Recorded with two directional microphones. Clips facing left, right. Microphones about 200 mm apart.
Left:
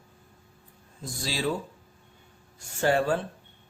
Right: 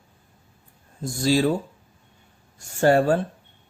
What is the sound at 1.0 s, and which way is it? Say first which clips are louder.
Speech: right 10 dB; 45° right (ahead or behind).